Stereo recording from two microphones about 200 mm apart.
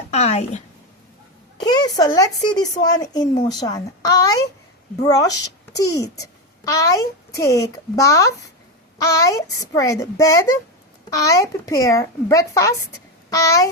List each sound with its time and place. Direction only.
0.1 s a woman's voice: 35° left (ahead or behind)
1.5 s a child's voice: 20° left (ahead or behind)